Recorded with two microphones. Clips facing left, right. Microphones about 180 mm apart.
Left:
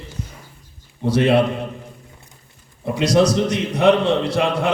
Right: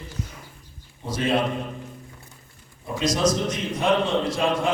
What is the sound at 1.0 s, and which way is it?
Speech, 65° left (ahead or behind).